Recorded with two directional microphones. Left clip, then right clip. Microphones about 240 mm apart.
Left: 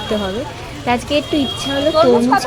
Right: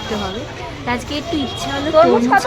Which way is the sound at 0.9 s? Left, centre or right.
Centre.